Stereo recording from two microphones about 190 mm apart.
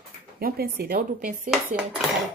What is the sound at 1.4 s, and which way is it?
Dishes, 5° right (ahead or behind).